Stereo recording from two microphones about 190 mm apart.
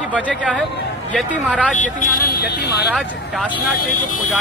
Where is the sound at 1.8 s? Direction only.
45° left (ahead or behind).